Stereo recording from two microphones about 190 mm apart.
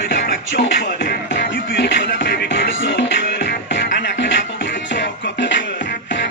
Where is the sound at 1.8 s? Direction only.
65° left (ahead or behind).